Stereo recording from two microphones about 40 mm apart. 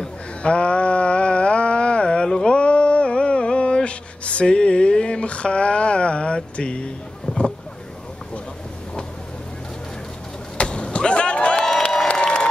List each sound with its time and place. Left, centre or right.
0.4 s a sound: left
7.3 s boat: left
10.6 s vehicle: left
11.5 s crowd: centre